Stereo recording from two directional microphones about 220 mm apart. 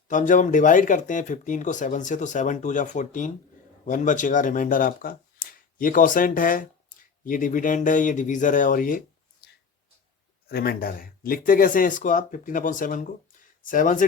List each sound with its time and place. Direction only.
0.1 s speech: 35° left (ahead or behind)
10.5 s speech: 45° left (ahead or behind)